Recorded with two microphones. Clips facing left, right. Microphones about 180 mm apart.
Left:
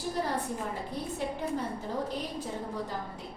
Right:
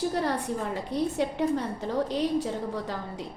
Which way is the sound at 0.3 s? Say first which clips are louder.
Right 4 dB; 80° right.